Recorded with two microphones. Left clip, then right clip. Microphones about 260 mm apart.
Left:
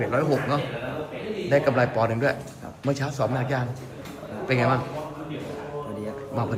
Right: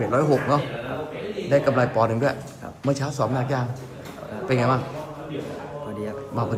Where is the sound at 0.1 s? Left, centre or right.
Centre.